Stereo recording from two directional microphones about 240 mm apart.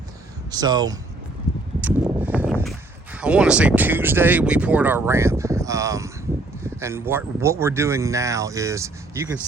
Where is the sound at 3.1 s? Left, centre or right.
Centre.